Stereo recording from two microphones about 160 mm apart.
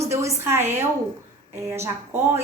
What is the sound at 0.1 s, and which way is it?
A woman's voice, 20° right (ahead or behind).